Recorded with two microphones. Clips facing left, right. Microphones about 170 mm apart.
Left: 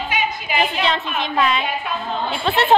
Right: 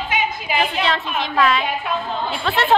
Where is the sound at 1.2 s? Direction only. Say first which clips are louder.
Right 2 dB; 20° left (ahead or behind).